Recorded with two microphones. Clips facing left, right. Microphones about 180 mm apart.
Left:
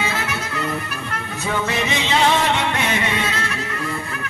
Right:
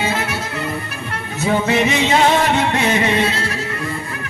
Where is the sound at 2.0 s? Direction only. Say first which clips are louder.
Even; 40° right (ahead or behind).